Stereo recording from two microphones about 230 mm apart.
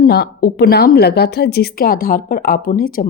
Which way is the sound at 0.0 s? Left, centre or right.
Left.